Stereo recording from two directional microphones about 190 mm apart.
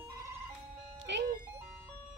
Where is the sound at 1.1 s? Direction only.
65° right (ahead or behind).